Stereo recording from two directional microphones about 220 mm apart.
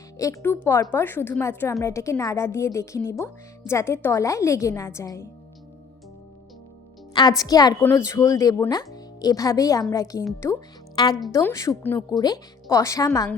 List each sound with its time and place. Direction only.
0.2 s a woman's voice: 10° left (ahead or behind)
7.1 s a woman's voice: 20° left (ahead or behind)